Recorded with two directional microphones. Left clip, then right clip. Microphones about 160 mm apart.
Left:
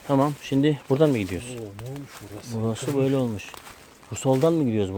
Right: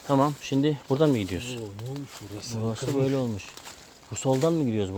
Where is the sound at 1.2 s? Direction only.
5° right (ahead or behind).